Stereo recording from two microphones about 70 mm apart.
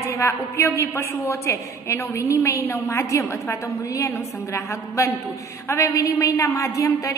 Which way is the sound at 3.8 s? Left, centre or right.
Left.